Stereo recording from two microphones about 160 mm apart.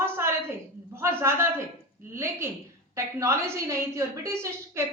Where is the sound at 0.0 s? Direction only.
15° right (ahead or behind).